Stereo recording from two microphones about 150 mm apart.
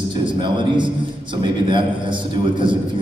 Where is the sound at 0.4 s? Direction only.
30° right (ahead or behind).